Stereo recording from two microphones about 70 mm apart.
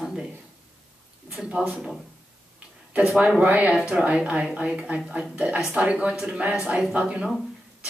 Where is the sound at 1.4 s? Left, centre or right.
Centre.